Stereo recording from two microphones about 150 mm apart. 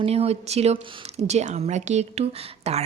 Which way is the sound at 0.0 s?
45° right (ahead or behind).